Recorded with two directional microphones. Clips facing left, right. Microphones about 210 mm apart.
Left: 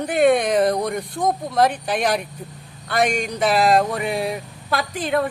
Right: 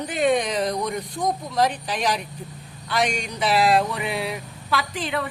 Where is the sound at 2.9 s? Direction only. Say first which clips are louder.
Left 4 dB; 55° left (ahead or behind).